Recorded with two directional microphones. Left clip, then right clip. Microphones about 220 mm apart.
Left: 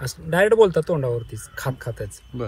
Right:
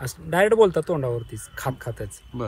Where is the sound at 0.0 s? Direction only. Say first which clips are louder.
Left 1 dB; 15° right (ahead or behind).